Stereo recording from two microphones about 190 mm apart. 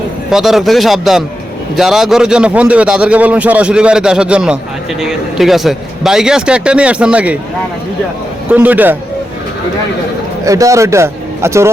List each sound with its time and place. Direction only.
0.3 s a man's voice: centre (ahead or behind)
8.4 s a man's voice: 10° right (ahead or behind)
10.4 s a man's voice: 15° right (ahead or behind)